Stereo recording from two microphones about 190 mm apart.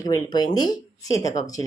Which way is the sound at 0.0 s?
20° left (ahead or behind).